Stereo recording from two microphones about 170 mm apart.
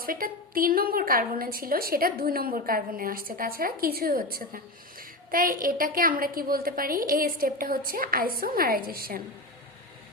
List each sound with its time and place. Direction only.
0.0 s a woman's voice: 60° right (ahead or behind)